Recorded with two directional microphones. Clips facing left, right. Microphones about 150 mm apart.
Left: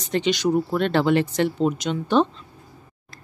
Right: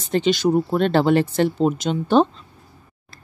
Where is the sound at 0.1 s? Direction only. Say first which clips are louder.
Right 3 dB; 35° right (ahead or behind).